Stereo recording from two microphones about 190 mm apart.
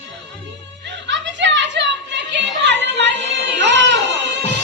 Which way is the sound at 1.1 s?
70° right (ahead or behind).